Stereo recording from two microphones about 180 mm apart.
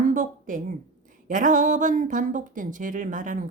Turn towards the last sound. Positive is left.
turn(degrees=-50)  # may be behind; listen again after turning